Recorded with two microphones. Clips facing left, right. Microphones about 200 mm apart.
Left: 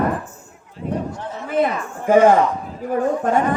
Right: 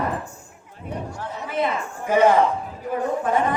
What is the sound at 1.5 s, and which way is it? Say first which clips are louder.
A man's voice: left 5 dB; 50° left (ahead or behind).